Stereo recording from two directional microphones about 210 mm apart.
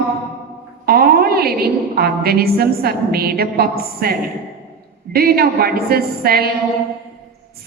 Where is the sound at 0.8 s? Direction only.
45° right (ahead or behind).